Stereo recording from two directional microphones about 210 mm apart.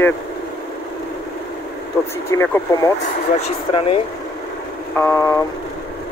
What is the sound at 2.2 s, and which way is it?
Speech, 10° left (ahead or behind).